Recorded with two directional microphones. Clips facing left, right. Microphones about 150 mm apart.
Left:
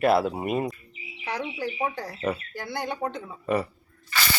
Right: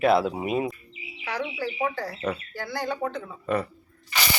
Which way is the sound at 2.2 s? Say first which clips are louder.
Left 2 dB; 10° left (ahead or behind).